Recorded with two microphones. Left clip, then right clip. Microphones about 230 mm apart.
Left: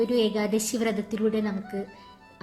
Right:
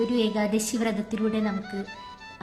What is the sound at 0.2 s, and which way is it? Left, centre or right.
A woman's voice, centre.